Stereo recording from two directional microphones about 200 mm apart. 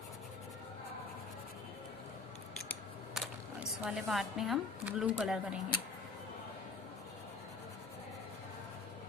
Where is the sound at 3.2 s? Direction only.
5° right (ahead or behind).